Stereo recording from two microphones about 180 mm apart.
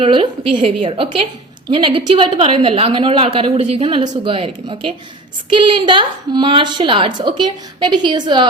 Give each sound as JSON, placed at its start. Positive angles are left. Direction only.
{"t": 0.0, "sound": "a woman's voice", "side_deg": -30}